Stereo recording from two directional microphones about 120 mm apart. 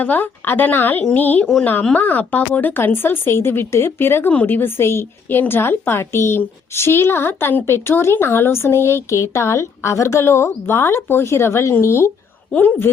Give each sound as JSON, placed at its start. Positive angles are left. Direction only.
{"t": 0.0, "sound": "a woman's voice", "side_deg": 15}